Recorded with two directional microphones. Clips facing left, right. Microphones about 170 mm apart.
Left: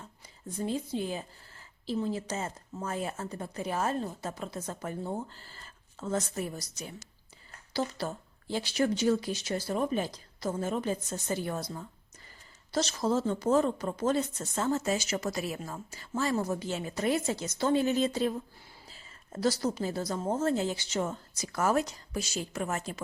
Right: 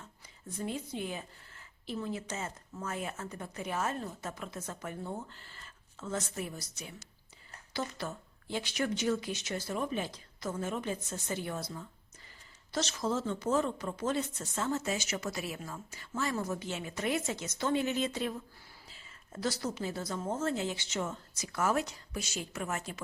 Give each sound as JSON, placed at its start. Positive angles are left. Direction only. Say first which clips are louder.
{"t": 0.6, "sound": "a woman's voice", "louder": "left 5 dB", "side_deg": 30}